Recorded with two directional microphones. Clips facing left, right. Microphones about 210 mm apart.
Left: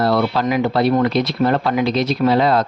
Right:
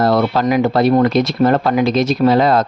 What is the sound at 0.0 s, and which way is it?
Speech, 45° right (ahead or behind).